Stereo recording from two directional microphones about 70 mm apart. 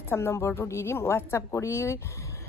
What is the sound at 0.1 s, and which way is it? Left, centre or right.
Speech, left.